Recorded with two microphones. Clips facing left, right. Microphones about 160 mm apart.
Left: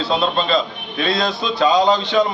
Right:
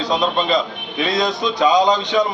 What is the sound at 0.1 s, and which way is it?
A man's voice, 15° right (ahead or behind).